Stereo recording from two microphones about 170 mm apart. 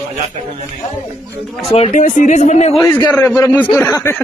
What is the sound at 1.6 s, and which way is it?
Speech, 35° left (ahead or behind).